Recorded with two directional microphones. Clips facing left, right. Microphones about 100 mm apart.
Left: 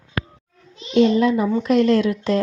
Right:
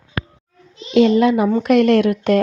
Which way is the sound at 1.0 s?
80° right.